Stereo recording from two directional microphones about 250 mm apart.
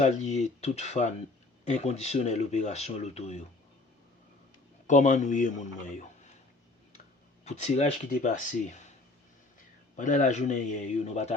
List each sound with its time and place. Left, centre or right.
0.0 s speech: left
4.9 s speech: left
7.4 s speech: left
9.9 s speech: left